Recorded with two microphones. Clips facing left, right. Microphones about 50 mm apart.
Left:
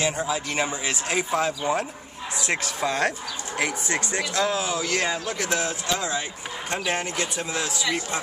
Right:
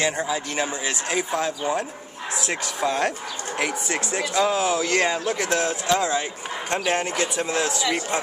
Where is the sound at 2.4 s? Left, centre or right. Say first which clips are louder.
Even; centre.